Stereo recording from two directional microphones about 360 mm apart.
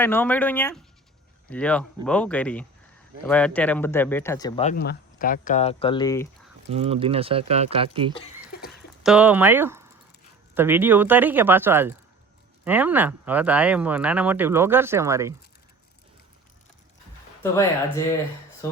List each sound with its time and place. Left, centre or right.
0.0 s speech: centre
6.7 s speech: centre
9.0 s speech: centre
17.4 s speech: centre